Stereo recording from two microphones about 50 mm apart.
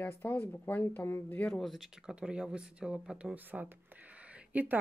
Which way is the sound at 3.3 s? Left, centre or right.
Right.